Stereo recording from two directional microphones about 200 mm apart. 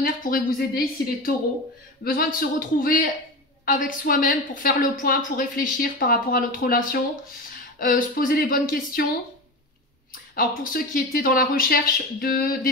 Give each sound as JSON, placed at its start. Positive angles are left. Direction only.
{"t": 0.0, "sound": "a woman's voice", "side_deg": 45}
{"t": 10.3, "sound": "a woman's voice", "side_deg": 45}